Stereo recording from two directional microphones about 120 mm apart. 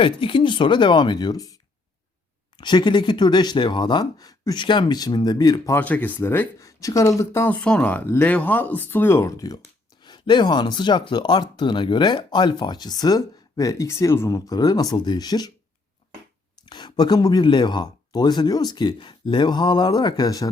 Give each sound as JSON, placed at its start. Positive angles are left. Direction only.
{"t": 0.0, "sound": "speech", "side_deg": 50}
{"t": 2.6, "sound": "speech", "side_deg": 40}
{"t": 5.7, "sound": "speech", "side_deg": 15}
{"t": 6.6, "sound": "speech", "side_deg": 25}
{"t": 7.5, "sound": "speech", "side_deg": 10}
{"t": 16.6, "sound": "speech", "side_deg": 35}